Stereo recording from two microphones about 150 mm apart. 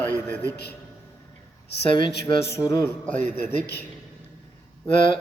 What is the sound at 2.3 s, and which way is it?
Speech, 35° left (ahead or behind).